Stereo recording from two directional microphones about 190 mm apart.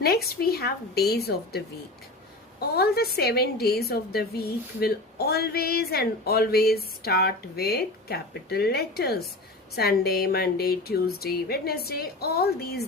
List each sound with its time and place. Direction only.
0.0 s a woman's voice: 55° left (ahead or behind)